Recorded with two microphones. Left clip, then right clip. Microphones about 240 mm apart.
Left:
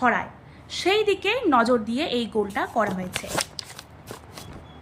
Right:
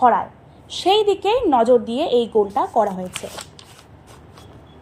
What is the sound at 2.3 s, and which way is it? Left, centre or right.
Speech, centre.